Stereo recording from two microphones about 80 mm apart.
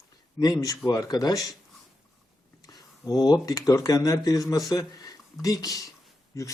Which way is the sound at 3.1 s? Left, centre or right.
Left.